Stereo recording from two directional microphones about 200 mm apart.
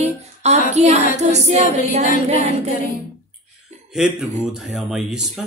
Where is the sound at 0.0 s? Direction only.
35° right (ahead or behind).